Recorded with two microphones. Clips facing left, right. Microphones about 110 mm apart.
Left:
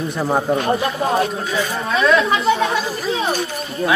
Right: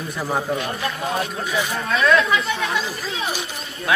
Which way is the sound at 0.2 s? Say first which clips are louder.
Left 5 dB; 25° left (ahead or behind).